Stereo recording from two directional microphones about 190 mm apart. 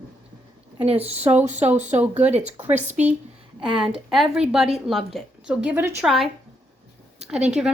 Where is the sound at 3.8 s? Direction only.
5° right (ahead or behind).